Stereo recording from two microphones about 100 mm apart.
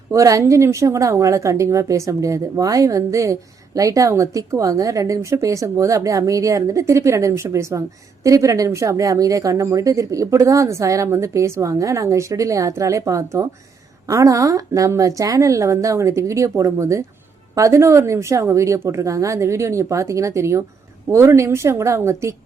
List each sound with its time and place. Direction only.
0.1 s speech: 35° right (ahead or behind)